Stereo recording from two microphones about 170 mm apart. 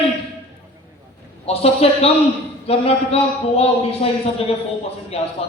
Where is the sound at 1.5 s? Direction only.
35° left (ahead or behind).